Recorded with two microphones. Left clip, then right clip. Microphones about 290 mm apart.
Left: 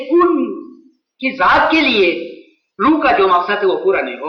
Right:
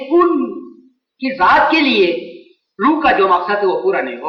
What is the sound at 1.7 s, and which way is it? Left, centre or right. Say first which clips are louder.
A man's voice: even; right.